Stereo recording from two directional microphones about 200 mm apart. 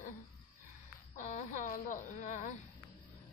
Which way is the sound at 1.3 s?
40° left (ahead or behind).